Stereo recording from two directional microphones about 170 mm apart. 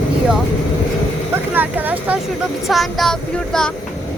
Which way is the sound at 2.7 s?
Centre (ahead or behind).